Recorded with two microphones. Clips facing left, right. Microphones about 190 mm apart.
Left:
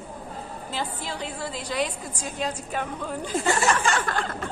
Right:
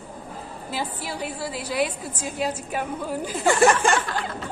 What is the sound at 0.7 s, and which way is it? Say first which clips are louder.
A woman's voice: right 2 dB; 10° right (ahead or behind).